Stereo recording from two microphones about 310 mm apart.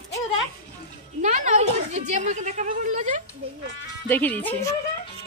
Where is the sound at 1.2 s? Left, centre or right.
Right.